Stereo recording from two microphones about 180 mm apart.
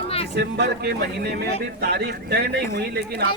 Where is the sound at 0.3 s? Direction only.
65° right (ahead or behind).